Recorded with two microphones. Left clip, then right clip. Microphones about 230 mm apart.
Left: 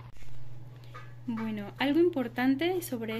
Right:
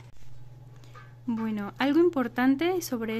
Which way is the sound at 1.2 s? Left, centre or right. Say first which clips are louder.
Right 4 dB; right.